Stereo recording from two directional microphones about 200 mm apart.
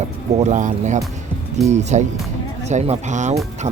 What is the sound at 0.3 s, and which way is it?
Speech, 35° right (ahead or behind).